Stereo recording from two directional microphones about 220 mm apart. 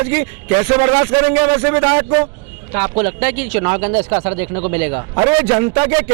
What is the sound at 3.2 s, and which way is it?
Speech, 10° right (ahead or behind).